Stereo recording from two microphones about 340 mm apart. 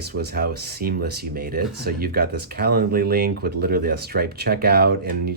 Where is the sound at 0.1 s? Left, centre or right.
Right.